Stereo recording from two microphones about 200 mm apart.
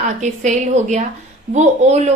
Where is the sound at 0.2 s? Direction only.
35° right (ahead or behind).